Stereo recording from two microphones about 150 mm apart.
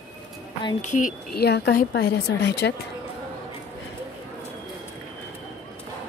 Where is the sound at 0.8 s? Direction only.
55° left (ahead or behind); by 2.2 s 90° left.